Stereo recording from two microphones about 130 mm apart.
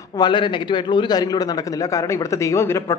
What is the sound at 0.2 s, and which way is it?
A man's voice, 35° left (ahead or behind).